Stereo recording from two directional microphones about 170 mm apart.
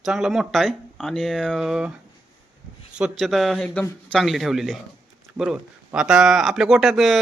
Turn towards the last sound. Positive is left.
turn(degrees=0)  # may be behind; listen again after turning